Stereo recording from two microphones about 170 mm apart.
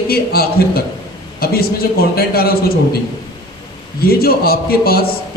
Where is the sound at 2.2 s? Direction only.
65° left (ahead or behind).